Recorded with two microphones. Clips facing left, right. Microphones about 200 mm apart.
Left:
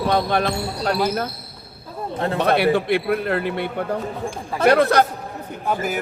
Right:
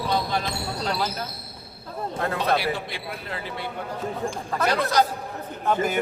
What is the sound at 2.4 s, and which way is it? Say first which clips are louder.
Speech: left 9 dB; 60° left (ahead or behind).